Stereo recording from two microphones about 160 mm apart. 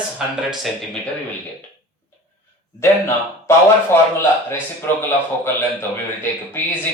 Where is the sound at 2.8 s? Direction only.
15° left (ahead or behind).